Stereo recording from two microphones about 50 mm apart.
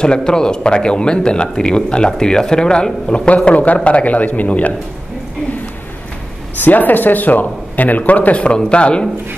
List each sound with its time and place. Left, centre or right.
0.0 s speech: centre
6.6 s speech: left